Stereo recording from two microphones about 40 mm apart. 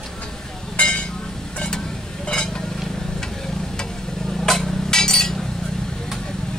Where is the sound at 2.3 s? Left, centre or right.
Centre.